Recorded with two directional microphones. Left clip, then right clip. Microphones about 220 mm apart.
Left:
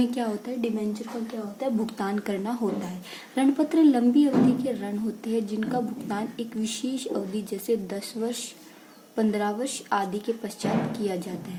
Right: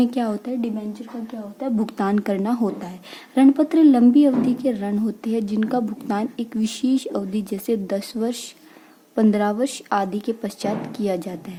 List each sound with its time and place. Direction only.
0.0 s speech: 45° right (ahead or behind)